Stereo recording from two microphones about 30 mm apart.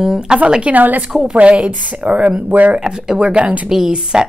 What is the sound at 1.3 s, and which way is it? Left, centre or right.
A woman's voice, right.